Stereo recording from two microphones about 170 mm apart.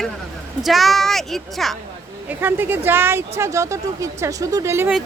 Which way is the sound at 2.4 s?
10° right (ahead or behind).